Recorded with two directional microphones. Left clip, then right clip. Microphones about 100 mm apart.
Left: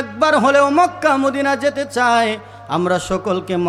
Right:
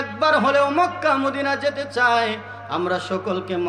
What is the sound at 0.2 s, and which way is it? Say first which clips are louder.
A man's voice: left 4 dB; 50° left (ahead or behind).